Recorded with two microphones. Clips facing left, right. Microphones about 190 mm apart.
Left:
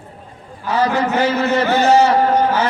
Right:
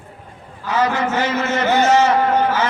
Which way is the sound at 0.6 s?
35° left (ahead or behind).